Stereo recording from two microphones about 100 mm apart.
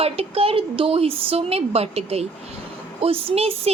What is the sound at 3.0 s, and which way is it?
Speech, 70° right (ahead or behind).